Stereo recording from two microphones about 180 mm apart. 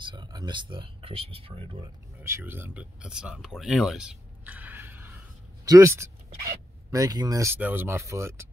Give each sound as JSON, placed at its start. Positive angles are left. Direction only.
{"t": 0.0, "sound": "speech", "side_deg": -25}
{"t": 2.2, "sound": "speech", "side_deg": -15}